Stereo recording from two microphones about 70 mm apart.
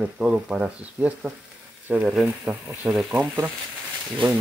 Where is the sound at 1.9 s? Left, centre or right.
Centre.